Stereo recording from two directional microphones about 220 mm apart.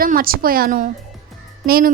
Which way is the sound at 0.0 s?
40° right (ahead or behind).